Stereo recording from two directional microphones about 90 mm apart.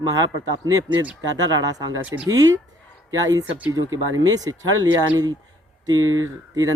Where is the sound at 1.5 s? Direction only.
50° right (ahead or behind).